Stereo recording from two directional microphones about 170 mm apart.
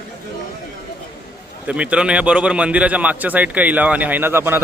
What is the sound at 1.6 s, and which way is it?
A man's voice, 5° right (ahead or behind).